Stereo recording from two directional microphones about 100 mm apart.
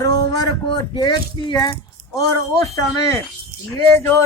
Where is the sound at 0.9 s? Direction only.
45° left (ahead or behind).